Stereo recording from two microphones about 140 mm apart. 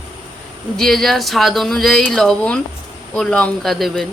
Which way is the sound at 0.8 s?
5° left (ahead or behind).